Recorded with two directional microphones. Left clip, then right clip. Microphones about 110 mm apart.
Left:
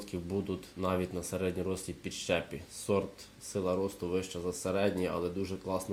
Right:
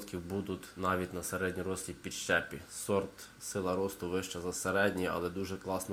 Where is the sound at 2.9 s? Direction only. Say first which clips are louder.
Left 1 dB; centre (ahead or behind).